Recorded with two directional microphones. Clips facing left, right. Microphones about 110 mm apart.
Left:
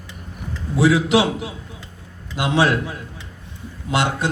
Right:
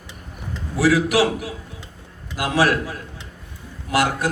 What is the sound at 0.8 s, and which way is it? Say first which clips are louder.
A man's voice: left 1 dB; 25° left (ahead or behind).